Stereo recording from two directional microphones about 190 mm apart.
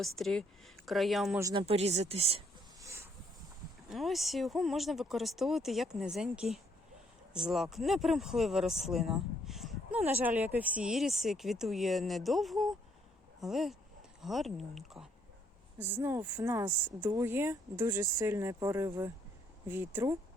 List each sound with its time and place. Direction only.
0.0 s speech: centre (ahead or behind)
1.4 s speech: 20° right (ahead or behind)
1.6 s speech: 35° right (ahead or behind)
3.8 s speech: centre (ahead or behind)
16.0 s speech: 15° right (ahead or behind)